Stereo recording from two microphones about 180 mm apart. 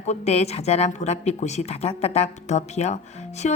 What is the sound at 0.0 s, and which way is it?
A woman's voice, 40° left (ahead or behind).